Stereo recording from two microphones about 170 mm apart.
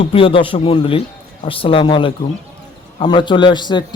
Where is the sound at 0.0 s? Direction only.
35° left (ahead or behind).